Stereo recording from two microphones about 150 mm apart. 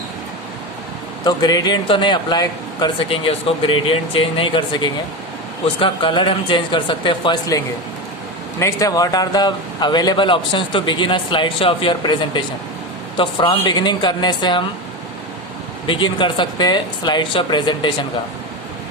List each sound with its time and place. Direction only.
1.2 s speech: 25° left (ahead or behind)
15.9 s speech: 35° left (ahead or behind)